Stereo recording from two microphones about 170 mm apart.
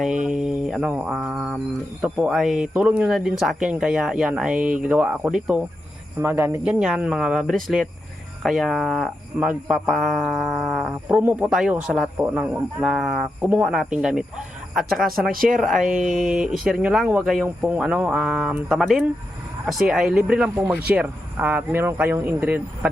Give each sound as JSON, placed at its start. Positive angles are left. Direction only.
{"t": 0.0, "sound": "mantra", "side_deg": -5}
{"t": 2.0, "sound": "speech", "side_deg": -5}
{"t": 15.3, "sound": "speech", "side_deg": -55}
{"t": 15.5, "sound": "speech", "side_deg": 0}
{"t": 15.8, "sound": "speech", "side_deg": -50}
{"t": 16.2, "sound": "speech", "side_deg": -5}